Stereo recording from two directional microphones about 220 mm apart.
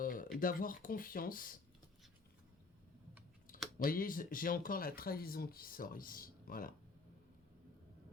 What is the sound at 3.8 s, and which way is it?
Speech, 40° left (ahead or behind).